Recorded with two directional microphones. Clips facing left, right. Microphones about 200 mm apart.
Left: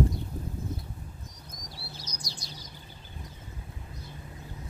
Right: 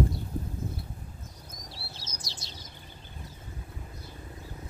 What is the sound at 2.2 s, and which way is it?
Bird, 25° right (ahead or behind).